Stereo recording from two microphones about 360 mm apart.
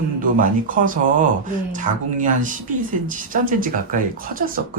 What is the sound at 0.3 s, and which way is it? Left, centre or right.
Speech, right.